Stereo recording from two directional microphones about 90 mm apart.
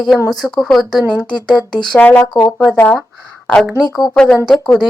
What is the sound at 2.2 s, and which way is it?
Speech, 50° left (ahead or behind).